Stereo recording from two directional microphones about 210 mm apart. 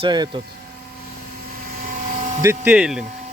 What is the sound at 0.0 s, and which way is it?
Speech, 20° right (ahead or behind).